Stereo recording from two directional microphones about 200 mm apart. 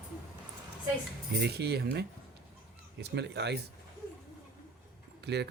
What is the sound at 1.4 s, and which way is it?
Speech, 55° right (ahead or behind).